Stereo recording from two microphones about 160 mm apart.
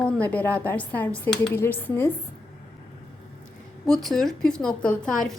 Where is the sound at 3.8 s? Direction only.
Centre (ahead or behind).